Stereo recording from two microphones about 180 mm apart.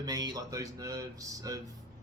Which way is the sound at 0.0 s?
20° right (ahead or behind).